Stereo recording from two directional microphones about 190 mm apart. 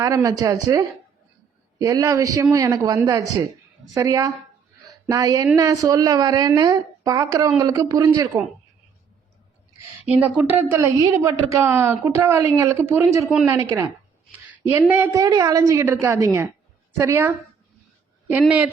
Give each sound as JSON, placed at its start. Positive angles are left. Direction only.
{"t": 0.0, "sound": "a woman's voice", "side_deg": -15}
{"t": 4.8, "sound": "a sound", "side_deg": -20}
{"t": 5.5, "sound": "a woman's voice", "side_deg": -15}
{"t": 9.7, "sound": "a woman's voice", "side_deg": -10}